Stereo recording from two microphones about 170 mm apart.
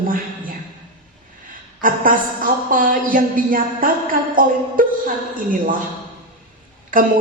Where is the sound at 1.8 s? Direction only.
55° right (ahead or behind).